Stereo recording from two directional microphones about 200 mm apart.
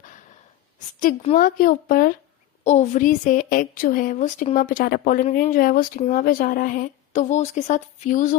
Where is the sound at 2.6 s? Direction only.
35° left (ahead or behind).